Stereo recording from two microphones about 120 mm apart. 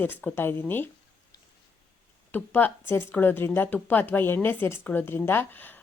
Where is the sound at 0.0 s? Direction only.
15° left (ahead or behind).